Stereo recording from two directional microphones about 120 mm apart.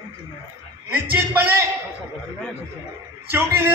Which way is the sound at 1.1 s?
20° right (ahead or behind).